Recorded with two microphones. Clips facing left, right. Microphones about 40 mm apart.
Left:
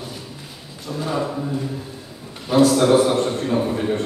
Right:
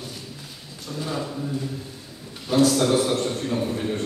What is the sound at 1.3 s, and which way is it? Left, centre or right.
Chant, left.